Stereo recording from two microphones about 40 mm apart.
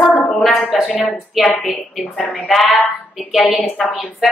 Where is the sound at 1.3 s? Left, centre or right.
Centre.